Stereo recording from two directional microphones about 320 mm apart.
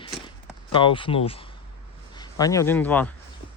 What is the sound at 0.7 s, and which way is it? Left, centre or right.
Speech, centre.